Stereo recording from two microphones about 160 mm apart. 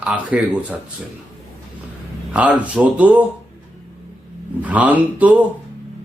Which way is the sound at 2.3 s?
10° right (ahead or behind).